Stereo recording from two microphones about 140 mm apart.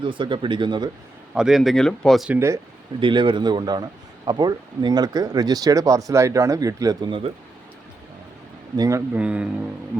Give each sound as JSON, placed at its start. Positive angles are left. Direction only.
{"t": 0.0, "sound": "speech", "side_deg": -35}
{"t": 1.3, "sound": "speech", "side_deg": -5}
{"t": 2.3, "sound": "speech", "side_deg": -20}
{"t": 3.0, "sound": "speech", "side_deg": -35}
{"t": 8.7, "sound": "speech", "side_deg": -25}
{"t": 9.2, "sound": "speech", "side_deg": -10}